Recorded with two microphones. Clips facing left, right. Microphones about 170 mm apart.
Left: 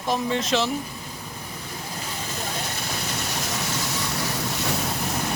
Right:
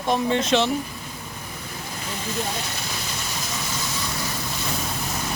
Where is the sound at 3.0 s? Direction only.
65° left (ahead or behind).